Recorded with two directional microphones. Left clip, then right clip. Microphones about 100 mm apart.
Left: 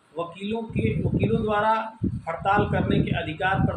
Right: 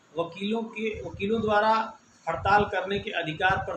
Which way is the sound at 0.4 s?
5° right (ahead or behind).